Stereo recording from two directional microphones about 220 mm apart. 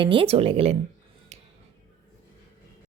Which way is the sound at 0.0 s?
25° right (ahead or behind).